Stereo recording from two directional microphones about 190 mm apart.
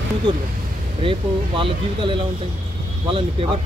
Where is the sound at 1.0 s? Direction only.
30° right (ahead or behind).